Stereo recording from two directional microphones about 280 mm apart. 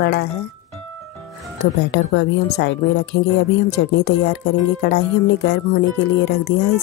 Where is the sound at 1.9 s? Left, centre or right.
Left.